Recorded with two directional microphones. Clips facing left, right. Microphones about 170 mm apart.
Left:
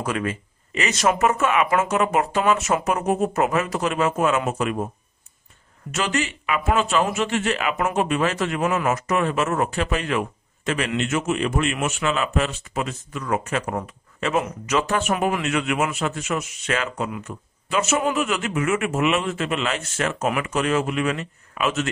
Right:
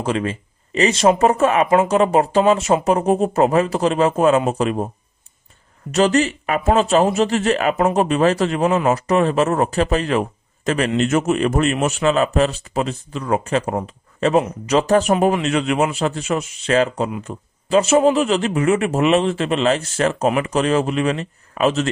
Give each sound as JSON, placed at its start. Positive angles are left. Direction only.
{"t": 0.0, "sound": "a man's voice", "side_deg": -30}
{"t": 5.9, "sound": "a man's voice", "side_deg": -35}